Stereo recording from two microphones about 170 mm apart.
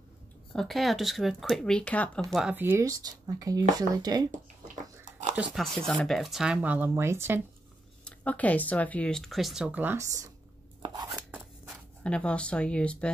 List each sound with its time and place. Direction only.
0.5 s speech: centre (ahead or behind)
2.3 s speech: 5° right (ahead or behind)
5.3 s speech: 5° right (ahead or behind)
8.0 s speech: 10° left (ahead or behind); by 10.3 s 20° right (ahead or behind)
11.1 s a sound: centre (ahead or behind)
12.0 s speech: 5° left (ahead or behind)